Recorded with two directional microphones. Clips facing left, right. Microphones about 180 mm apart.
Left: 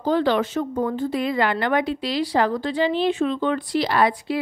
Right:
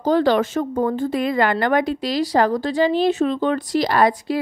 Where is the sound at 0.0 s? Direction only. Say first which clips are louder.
Right 3 dB; 40° right (ahead or behind).